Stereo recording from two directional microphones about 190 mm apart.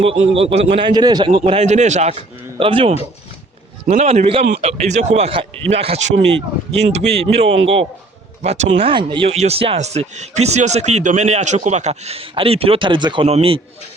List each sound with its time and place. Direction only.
0.1 s speech: 30° right (ahead or behind)
8.8 s speech: 25° right (ahead or behind)